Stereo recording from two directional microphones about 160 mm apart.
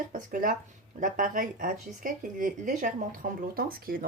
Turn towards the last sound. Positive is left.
turn(degrees=-65)  # may be behind; listen again after turning